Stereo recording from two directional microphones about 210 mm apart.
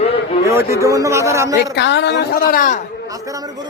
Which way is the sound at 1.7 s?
55° left (ahead or behind).